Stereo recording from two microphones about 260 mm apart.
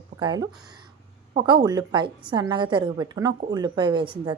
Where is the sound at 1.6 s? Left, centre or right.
Centre.